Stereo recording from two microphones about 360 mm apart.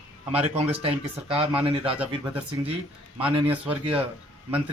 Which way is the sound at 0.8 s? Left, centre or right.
Centre.